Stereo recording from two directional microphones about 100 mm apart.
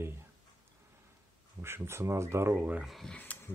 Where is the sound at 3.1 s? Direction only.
15° left (ahead or behind).